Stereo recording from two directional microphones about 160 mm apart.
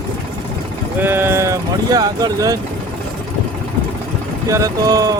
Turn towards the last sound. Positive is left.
turn(degrees=-20)  # may be behind; listen again after turning